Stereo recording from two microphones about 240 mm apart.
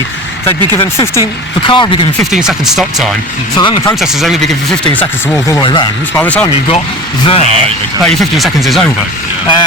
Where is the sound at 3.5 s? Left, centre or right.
Centre.